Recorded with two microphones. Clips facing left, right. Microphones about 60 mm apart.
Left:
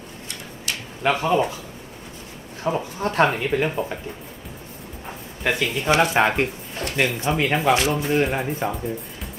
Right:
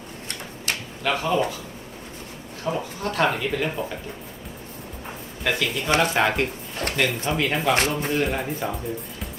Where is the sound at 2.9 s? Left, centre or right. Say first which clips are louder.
Left 3 dB; left.